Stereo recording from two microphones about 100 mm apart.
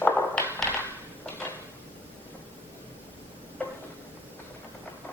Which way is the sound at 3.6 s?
15° left (ahead or behind).